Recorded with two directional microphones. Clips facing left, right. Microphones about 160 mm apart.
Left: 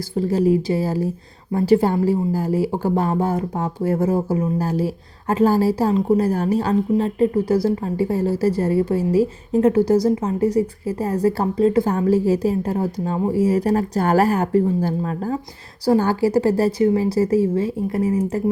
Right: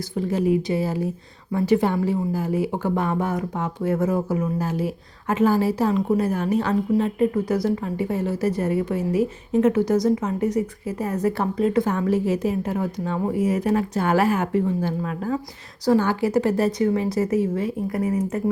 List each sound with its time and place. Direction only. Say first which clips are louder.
0.2 s a woman's voice: left 4 dB; 35° left (ahead or behind)